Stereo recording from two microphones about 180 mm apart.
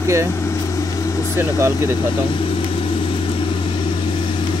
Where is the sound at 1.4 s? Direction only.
15° right (ahead or behind).